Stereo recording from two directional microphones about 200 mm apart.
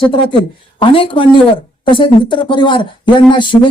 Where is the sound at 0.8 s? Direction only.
25° left (ahead or behind).